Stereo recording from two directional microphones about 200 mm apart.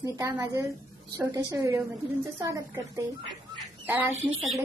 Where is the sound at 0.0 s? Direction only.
15° right (ahead or behind).